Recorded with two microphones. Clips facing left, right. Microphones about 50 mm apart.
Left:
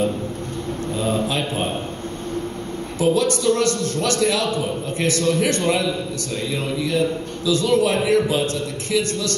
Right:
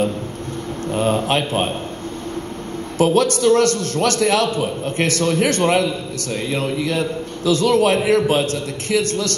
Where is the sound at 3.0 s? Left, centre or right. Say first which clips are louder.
Right 3 dB; right.